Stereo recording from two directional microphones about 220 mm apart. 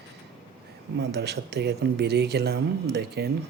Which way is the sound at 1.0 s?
50° right (ahead or behind).